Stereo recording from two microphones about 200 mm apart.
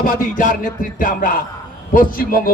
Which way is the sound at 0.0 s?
45° left (ahead or behind).